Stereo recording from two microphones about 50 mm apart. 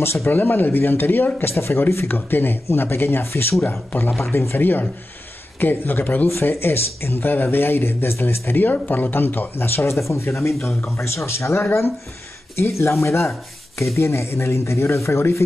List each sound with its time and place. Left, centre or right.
0.0 s speech: left
0.3 s speech: left
2.0 s speech: left
6.2 s speech: left
8.8 s speech: left